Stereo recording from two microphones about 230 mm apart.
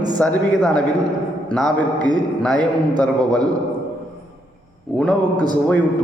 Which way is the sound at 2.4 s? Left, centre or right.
Centre.